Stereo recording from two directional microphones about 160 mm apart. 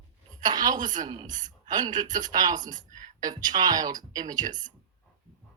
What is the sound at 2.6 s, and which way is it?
Speech, 55° right (ahead or behind).